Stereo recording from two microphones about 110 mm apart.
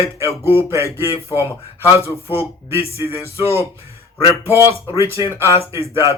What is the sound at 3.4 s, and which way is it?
Speech, 65° left (ahead or behind).